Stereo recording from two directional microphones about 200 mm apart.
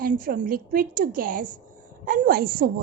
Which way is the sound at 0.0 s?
45° right (ahead or behind).